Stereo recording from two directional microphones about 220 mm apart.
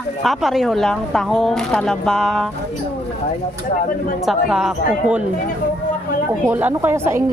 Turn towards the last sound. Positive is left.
turn(degrees=-10)  # may be behind; listen again after turning